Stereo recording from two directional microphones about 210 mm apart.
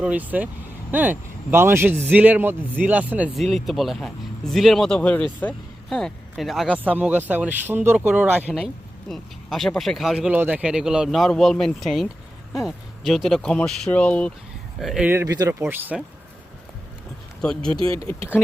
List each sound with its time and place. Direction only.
0.0 s speech: 5° right (ahead or behind)
17.4 s speech: 5° left (ahead or behind)
17.7 s speech: 25° right (ahead or behind)